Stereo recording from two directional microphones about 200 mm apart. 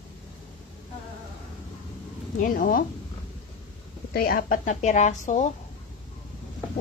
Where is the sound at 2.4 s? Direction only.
45° left (ahead or behind).